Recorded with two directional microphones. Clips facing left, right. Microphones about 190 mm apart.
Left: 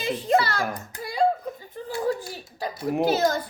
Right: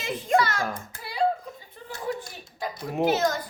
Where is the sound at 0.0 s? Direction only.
35° left (ahead or behind).